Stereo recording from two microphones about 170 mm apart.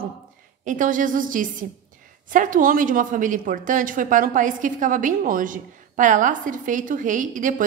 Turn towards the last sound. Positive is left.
turn(degrees=-50)  # may be behind; listen again after turning